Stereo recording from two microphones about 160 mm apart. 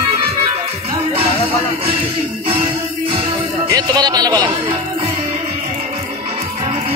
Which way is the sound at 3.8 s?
25° right (ahead or behind).